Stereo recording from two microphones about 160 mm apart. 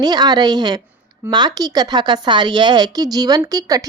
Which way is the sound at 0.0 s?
25° right (ahead or behind).